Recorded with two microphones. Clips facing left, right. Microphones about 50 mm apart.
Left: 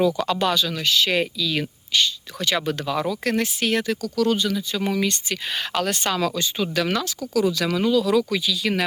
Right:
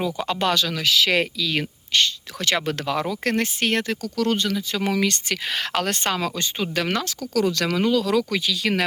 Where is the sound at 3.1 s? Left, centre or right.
Right.